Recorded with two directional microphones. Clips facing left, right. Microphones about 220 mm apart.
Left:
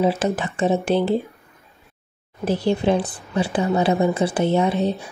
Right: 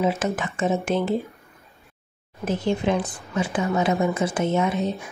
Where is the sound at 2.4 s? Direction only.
35° left (ahead or behind).